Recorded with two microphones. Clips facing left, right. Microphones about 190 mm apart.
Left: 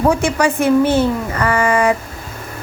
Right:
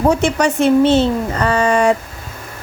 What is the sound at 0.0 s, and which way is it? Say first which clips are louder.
Speech: right 1 dB; 20° right (ahead or behind).